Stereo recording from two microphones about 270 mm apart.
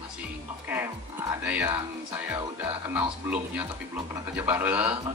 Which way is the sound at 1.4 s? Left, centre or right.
Centre.